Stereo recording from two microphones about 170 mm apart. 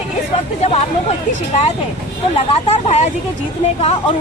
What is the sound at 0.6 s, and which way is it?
Speech, 40° left (ahead or behind).